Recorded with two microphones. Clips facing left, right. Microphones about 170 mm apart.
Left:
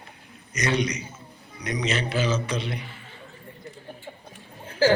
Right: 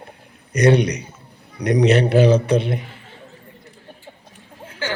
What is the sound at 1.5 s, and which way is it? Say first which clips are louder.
A man's voice: right 12 dB; 65° right (ahead or behind).